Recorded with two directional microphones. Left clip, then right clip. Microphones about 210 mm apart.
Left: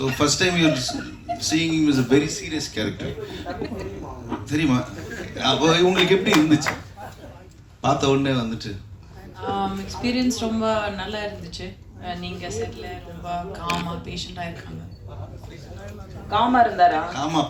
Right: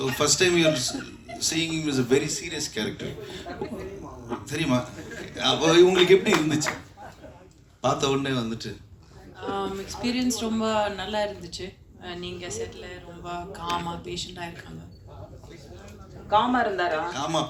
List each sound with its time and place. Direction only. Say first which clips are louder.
0.0 s speech: left 2 dB; 45° right (ahead or behind)
7.8 s speech: left 4 dB; 45° right (ahead or behind)
16.3 s speech: left 4 dB; 45° right (ahead or behind)